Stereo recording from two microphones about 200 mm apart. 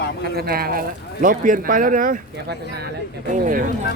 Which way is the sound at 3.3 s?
40° right (ahead or behind).